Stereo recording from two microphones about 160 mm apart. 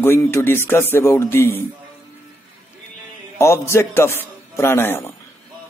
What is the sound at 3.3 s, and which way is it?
A man's voice, 15° left (ahead or behind).